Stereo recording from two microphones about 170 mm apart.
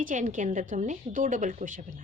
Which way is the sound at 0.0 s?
50° right (ahead or behind).